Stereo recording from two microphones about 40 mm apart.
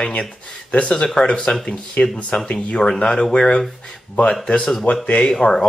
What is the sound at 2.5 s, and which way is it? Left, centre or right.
Speech, left.